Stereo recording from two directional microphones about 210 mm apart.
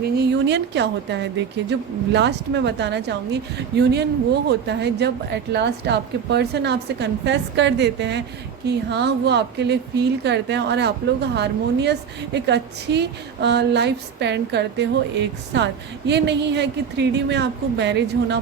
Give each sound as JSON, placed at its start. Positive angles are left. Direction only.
{"t": 0.0, "sound": "a woman's voice", "side_deg": -50}